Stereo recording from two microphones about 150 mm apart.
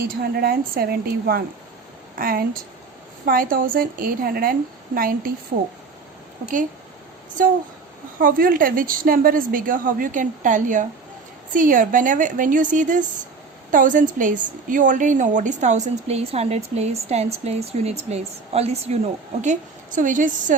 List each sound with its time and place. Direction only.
0.2 s a woman's voice: 85° right
2.1 s a woman's voice: 75° right (ahead or behind)
8.2 s a woman's voice: 70° right (ahead or behind); by 18.9 s 45° right (ahead or behind)
19.4 s a woman's voice: 55° right (ahead or behind)